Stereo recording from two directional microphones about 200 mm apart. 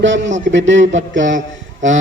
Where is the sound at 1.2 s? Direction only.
40° right (ahead or behind).